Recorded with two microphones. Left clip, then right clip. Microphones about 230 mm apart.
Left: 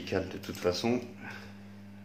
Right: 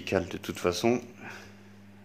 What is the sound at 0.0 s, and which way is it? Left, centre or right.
A man's voice, right.